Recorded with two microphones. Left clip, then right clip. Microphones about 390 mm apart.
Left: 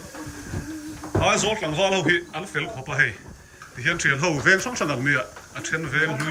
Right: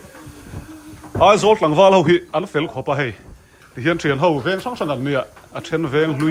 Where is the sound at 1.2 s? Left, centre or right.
Centre.